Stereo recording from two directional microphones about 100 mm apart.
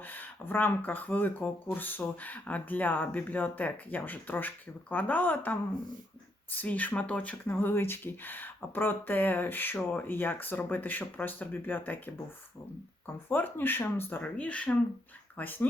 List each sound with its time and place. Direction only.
0.0 s speech: 20° left (ahead or behind)
13.2 s speech: 20° left (ahead or behind)